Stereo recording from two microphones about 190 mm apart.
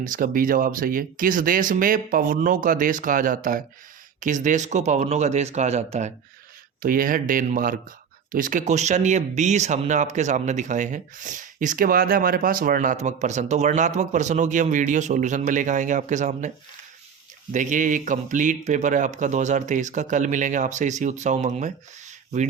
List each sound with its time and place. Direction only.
0.0 s speech: 45° right (ahead or behind)
6.8 s speech: 45° right (ahead or behind)
17.5 s speech: 40° right (ahead or behind)